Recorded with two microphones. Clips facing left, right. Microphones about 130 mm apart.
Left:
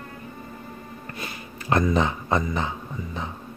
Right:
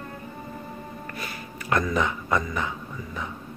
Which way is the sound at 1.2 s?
25° left (ahead or behind).